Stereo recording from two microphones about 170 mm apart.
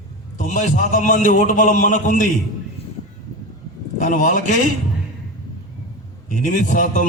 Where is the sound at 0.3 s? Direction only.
50° left (ahead or behind).